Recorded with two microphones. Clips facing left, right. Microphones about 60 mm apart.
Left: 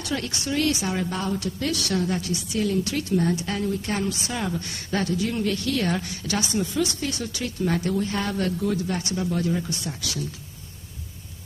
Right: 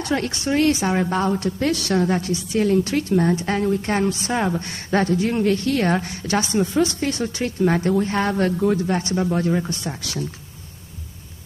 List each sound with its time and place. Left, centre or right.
0.0 s a woman's voice: right